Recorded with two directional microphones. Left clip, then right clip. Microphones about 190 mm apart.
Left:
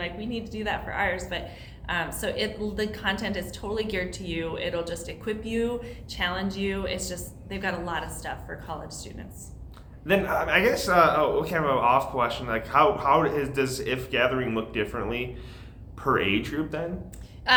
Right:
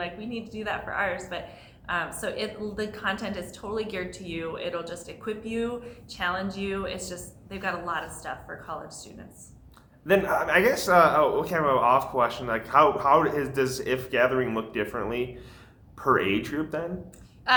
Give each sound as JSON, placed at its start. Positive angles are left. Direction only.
{"t": 0.0, "sound": "a woman's voice", "side_deg": 10}
{"t": 10.1, "sound": "speech", "side_deg": -20}